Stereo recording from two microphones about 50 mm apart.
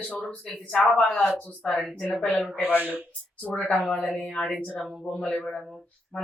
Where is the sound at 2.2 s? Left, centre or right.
Left.